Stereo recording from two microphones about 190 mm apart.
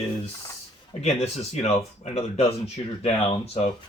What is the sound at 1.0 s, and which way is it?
Speech, 35° left (ahead or behind).